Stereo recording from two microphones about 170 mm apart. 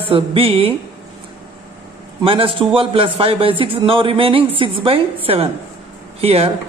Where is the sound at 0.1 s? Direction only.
35° right (ahead or behind).